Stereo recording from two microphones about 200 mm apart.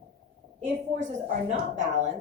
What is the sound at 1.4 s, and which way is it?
Speech, 35° right (ahead or behind).